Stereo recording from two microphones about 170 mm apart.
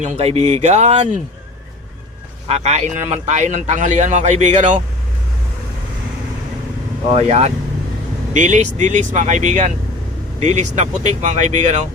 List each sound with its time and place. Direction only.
0.0 s speech: 40° right (ahead or behind)
2.5 s speech: 40° right (ahead or behind)
7.1 s speech: 40° right (ahead or behind)